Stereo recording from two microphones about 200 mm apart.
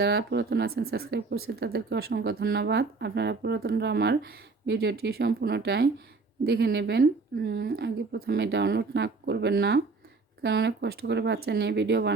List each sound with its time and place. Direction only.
0.0 s speech: 55° right (ahead or behind)